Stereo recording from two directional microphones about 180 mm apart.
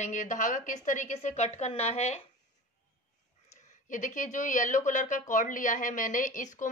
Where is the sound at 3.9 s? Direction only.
45° left (ahead or behind).